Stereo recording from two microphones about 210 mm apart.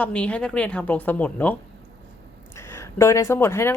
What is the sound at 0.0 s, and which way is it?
Speech, 5° left (ahead or behind).